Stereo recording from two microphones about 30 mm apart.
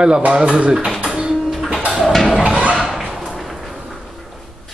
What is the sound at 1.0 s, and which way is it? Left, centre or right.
Music, right.